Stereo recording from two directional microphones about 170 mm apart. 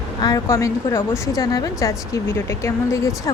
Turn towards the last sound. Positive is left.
turn(degrees=15)  # may be behind; listen again after turning